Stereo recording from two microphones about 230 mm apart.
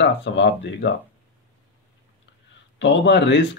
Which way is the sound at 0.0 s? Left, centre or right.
Left.